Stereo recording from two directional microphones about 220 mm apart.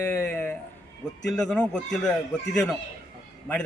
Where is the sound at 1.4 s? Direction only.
5° left (ahead or behind).